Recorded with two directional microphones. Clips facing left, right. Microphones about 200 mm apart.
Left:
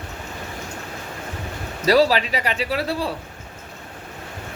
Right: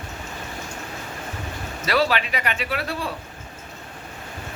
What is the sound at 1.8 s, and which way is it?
Speech, 35° left (ahead or behind).